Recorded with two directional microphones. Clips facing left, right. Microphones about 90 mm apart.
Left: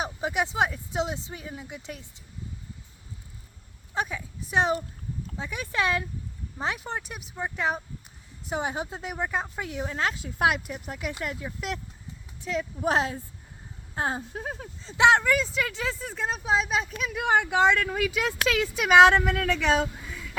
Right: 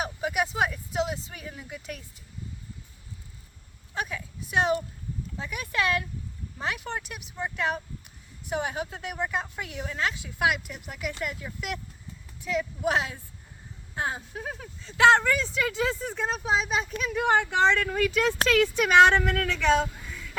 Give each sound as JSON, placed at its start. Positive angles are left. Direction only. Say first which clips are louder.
{"t": 0.0, "sound": "speech", "louder": "even", "side_deg": 25}
{"t": 4.1, "sound": "a woman's voice", "louder": "left 1 dB", "side_deg": 30}
{"t": 11.4, "sound": "speech", "louder": "left 1 dB", "side_deg": 20}
{"t": 15.2, "sound": "speech", "louder": "left 1 dB", "side_deg": 5}